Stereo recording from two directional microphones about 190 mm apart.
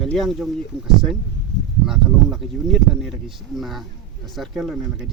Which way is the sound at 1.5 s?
65° right (ahead or behind).